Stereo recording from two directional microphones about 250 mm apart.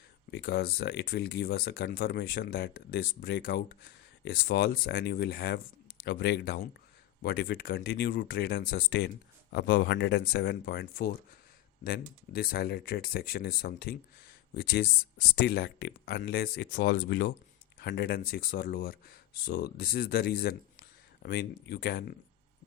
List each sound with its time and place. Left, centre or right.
0.3 s speech: left